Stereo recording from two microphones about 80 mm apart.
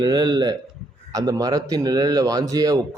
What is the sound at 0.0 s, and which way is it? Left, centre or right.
Speech, right.